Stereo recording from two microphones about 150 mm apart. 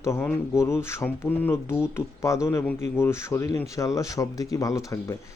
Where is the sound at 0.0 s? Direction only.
15° left (ahead or behind).